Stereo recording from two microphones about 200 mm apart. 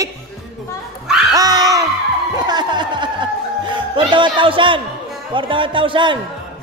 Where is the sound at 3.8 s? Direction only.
25° right (ahead or behind).